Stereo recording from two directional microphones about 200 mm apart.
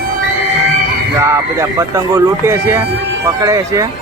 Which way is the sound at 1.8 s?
15° right (ahead or behind).